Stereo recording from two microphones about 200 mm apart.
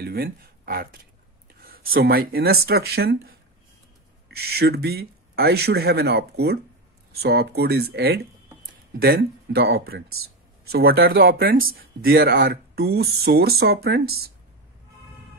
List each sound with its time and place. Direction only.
0.0 s speech: 50° right (ahead or behind)
4.4 s speech: 50° right (ahead or behind)